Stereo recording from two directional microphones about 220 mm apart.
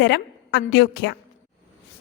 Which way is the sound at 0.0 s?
50° left (ahead or behind).